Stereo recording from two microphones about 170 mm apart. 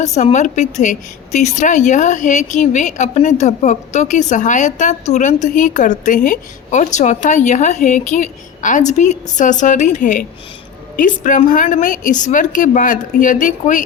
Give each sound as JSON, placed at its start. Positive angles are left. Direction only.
{"t": 0.0, "sound": "a woman's voice", "side_deg": 40}